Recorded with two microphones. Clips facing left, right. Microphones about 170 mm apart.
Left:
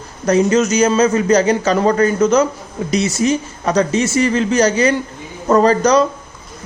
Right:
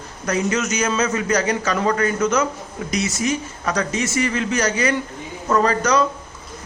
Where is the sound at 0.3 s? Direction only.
30° left (ahead or behind).